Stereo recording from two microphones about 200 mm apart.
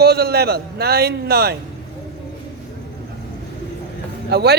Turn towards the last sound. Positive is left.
turn(degrees=-55)  # may be behind; listen again after turning